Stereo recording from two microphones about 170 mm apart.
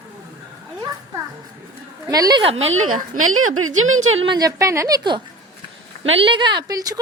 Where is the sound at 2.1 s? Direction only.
25° right (ahead or behind).